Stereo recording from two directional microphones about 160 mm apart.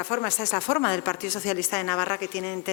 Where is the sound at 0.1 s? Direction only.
10° left (ahead or behind).